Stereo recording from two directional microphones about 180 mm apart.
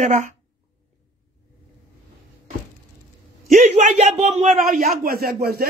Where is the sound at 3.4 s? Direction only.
40° right (ahead or behind).